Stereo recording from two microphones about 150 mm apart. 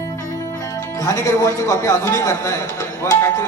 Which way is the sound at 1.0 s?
20° left (ahead or behind).